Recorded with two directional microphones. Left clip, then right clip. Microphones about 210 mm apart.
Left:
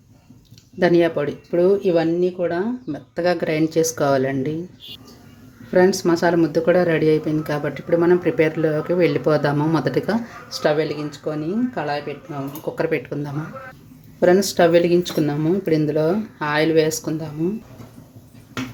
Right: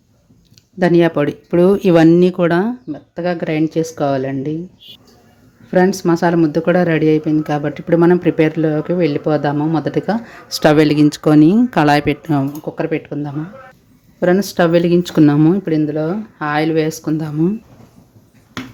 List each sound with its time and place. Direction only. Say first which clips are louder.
0.8 s speech: right 4 dB; 20° right (ahead or behind)
2.9 s speech: even; 15° right (ahead or behind)
5.7 s speech: right 2 dB; 20° right (ahead or behind); by 12.4 s 40° right (ahead or behind)
12.6 s speech: right 2 dB; 15° right (ahead or behind)
15.6 s speech: right 1 dB; 10° right (ahead or behind)